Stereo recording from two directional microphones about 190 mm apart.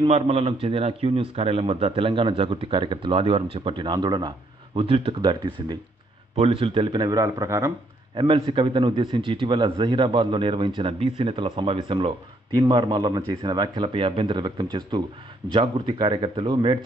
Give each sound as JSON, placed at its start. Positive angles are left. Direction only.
{"t": 0.0, "sound": "a man's voice", "side_deg": -30}